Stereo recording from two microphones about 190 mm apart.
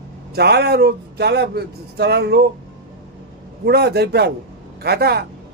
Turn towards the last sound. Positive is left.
turn(degrees=-55)  # may be behind; listen again after turning